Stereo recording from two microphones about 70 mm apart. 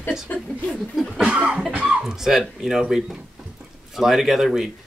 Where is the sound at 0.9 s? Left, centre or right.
Centre.